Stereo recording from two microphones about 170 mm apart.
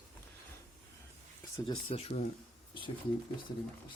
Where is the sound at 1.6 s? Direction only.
35° left (ahead or behind).